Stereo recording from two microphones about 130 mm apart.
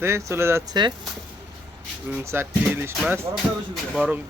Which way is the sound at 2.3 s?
15° right (ahead or behind).